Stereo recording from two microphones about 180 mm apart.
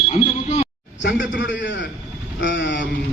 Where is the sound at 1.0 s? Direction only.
90° left.